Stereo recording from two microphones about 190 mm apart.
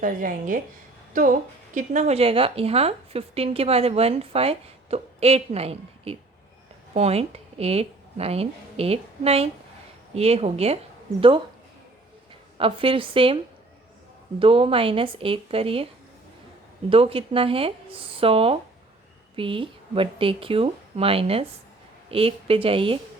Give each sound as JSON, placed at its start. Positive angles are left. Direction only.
{"t": 0.0, "sound": "a woman's voice", "side_deg": -45}
{"t": 12.5, "sound": "speech", "side_deg": -30}
{"t": 16.9, "sound": "speech", "side_deg": -30}